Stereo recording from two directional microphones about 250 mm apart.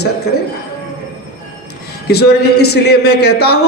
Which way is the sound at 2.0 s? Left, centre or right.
Left.